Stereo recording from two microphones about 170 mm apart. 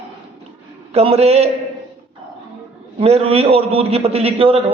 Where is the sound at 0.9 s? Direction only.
35° right (ahead or behind).